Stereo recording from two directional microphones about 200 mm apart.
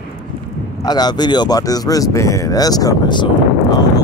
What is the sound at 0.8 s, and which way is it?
Speech, 20° left (ahead or behind).